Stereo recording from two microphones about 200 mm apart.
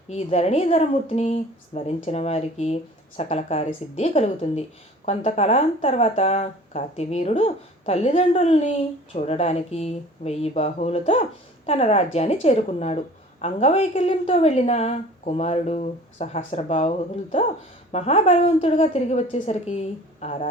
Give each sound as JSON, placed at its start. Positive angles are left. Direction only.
{"t": 0.1, "sound": "speech", "side_deg": 30}
{"t": 17.9, "sound": "speech", "side_deg": 30}